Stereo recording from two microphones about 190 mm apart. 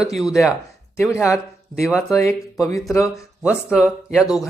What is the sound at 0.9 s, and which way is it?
Speech, 15° left (ahead or behind).